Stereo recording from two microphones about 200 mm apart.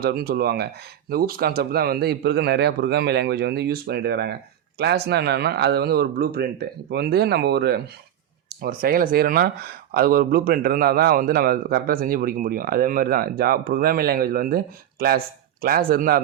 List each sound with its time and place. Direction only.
0.0 s speech: 50° right (ahead or behind)